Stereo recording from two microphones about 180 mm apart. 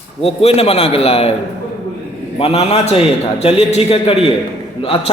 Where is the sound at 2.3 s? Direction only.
35° left (ahead or behind).